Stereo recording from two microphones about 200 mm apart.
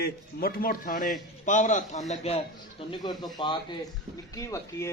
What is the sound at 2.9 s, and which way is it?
Speech, 20° left (ahead or behind).